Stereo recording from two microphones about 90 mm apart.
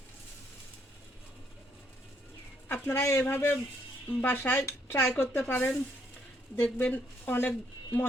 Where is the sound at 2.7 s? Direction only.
25° left (ahead or behind).